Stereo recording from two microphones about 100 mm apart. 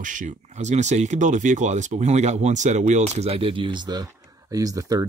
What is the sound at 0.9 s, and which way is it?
Speech, 90° right.